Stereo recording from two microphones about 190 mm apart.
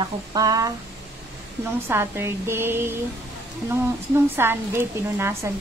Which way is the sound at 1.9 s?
10° right (ahead or behind).